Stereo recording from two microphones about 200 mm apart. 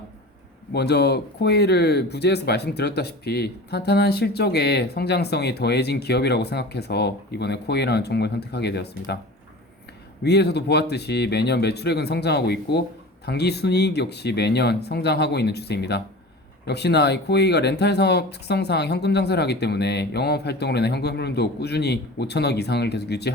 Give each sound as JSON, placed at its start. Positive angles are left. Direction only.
{"t": 0.7, "sound": "speech", "side_deg": 55}
{"t": 10.2, "sound": "speech", "side_deg": 55}